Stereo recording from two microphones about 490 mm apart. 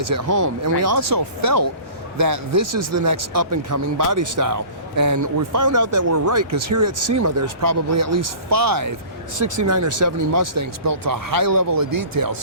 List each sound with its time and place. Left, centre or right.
0.0 s speech: right